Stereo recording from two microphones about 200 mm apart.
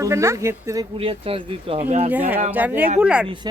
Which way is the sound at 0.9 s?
30° right (ahead or behind).